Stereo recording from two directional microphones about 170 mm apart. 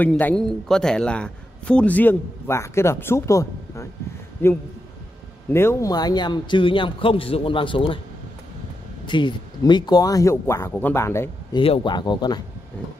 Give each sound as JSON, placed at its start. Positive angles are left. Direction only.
{"t": 0.0, "sound": "a man's voice", "side_deg": 10}
{"t": 9.0, "sound": "a man's voice", "side_deg": 30}
{"t": 11.5, "sound": "a man's voice", "side_deg": 30}